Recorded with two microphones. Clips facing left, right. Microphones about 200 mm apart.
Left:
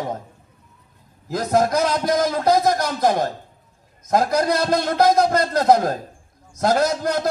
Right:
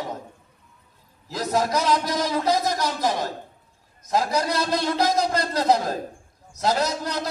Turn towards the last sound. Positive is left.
turn(degrees=50)  # may be behind; listen again after turning